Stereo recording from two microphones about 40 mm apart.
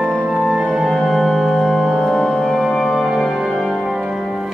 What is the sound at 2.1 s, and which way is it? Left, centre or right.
Music, centre.